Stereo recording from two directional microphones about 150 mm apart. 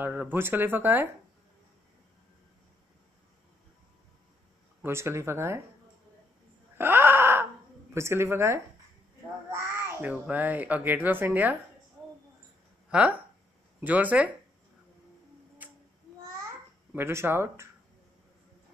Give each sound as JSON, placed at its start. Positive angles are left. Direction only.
{"t": 0.0, "sound": "a child's voice", "side_deg": -15}
{"t": 4.8, "sound": "a child's voice", "side_deg": -15}
{"t": 6.8, "sound": "wail", "side_deg": -15}
{"t": 7.9, "sound": "a child's voice", "side_deg": -20}
{"t": 12.9, "sound": "a child's voice", "side_deg": -10}
{"t": 15.6, "sound": "child singing", "side_deg": -10}
{"t": 16.9, "sound": "a child's voice", "side_deg": -15}